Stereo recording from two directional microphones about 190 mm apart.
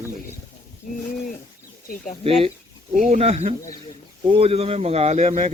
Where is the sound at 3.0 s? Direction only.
40° right (ahead or behind).